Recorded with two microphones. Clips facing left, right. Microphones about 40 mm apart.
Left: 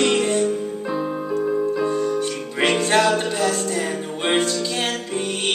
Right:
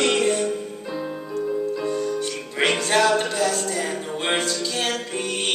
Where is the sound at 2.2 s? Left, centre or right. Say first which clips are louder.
Left 2 dB; centre.